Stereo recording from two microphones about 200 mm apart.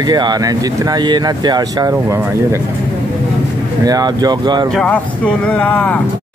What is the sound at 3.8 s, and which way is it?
Speech, 20° right (ahead or behind).